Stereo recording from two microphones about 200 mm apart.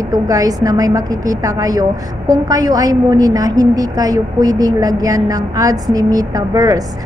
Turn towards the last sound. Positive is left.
turn(degrees=-20)  # may be behind; listen again after turning